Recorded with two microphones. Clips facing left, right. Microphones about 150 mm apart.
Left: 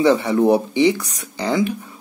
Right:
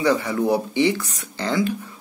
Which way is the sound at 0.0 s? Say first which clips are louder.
Left 5 dB; 20° left (ahead or behind).